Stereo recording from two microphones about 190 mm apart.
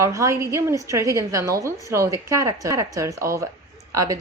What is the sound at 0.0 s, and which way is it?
Speech, 15° right (ahead or behind).